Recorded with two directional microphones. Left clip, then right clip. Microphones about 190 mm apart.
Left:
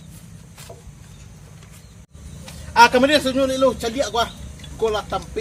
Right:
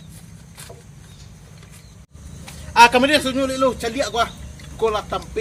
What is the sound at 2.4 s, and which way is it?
A man's voice, 5° right (ahead or behind).